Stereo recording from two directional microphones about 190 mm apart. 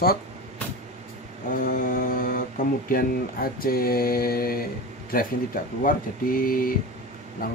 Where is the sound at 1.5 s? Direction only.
45° left (ahead or behind).